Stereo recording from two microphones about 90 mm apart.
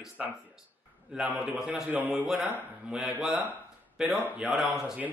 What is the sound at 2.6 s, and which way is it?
Speech, 20° right (ahead or behind).